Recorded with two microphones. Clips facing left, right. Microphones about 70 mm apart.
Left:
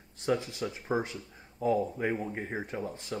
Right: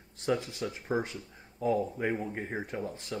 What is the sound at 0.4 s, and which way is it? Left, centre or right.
Speech, left.